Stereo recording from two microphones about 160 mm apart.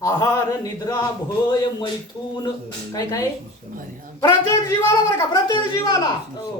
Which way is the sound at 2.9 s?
20° left (ahead or behind).